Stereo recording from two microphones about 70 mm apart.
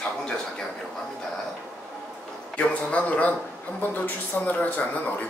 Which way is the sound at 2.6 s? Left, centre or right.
Centre.